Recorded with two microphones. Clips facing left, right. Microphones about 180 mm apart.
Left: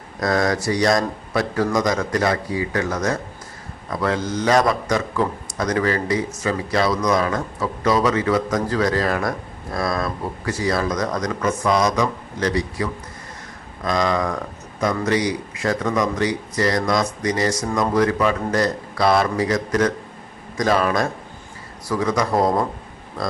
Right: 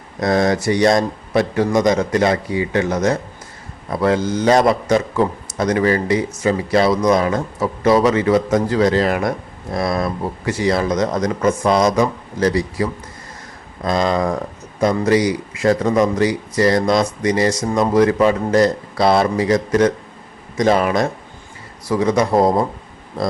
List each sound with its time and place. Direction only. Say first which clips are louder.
0.2 s a man's voice: right 4 dB; 25° right (ahead or behind)